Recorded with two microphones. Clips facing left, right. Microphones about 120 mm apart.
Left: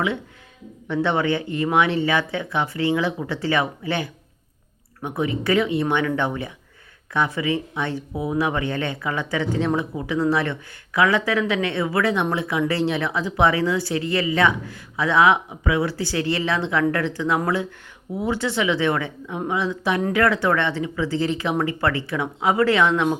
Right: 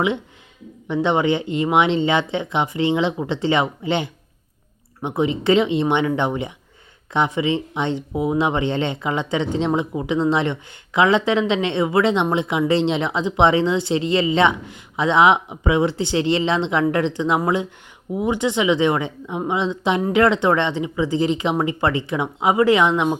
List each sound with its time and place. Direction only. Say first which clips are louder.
0.9 s speech: right 3 dB; 15° right (ahead or behind)